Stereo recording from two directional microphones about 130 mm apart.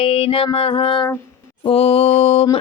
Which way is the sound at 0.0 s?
45° left (ahead or behind).